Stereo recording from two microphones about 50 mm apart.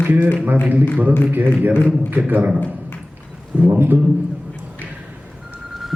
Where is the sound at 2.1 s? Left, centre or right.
Right.